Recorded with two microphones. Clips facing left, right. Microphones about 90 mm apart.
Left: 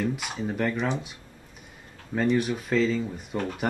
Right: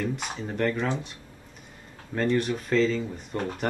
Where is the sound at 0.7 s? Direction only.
15° left (ahead or behind).